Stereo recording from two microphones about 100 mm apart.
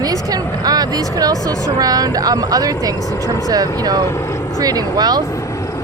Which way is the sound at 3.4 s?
40° right (ahead or behind).